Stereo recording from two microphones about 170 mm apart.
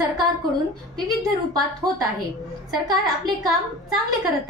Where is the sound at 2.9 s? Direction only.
25° right (ahead or behind).